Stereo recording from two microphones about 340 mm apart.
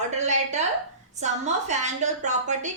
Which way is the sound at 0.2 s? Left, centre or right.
Centre.